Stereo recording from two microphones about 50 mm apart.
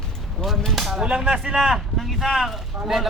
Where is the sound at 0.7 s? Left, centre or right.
Centre.